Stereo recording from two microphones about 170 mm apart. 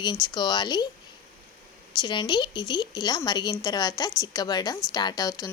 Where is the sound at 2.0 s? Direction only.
25° left (ahead or behind).